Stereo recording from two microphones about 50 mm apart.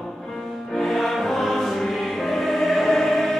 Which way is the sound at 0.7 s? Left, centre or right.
Centre.